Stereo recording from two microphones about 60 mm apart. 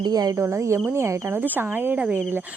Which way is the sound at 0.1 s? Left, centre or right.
Right.